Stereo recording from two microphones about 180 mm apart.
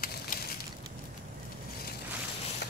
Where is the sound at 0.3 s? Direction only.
45° left (ahead or behind).